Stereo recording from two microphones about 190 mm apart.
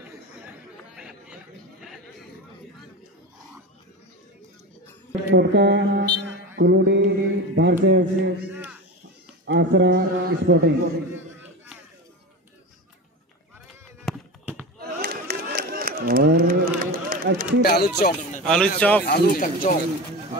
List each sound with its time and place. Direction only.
0.0 s chatter: 5° right (ahead or behind)
5.3 s mantra: 65° right (ahead or behind)
9.5 s mantra: 65° right (ahead or behind)
14.0 s a sound: 10° right (ahead or behind)
15.0 s a sound: 55° right (ahead or behind)
17.6 s speech: 55° left (ahead or behind)
18.4 s speech: 5° left (ahead or behind)
19.0 s speech: 50° left (ahead or behind)